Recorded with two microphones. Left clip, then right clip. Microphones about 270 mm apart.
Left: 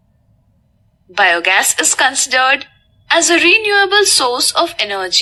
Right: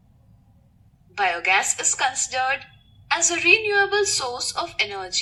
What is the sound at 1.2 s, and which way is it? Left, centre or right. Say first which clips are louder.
A woman's voice: left 9 dB; left.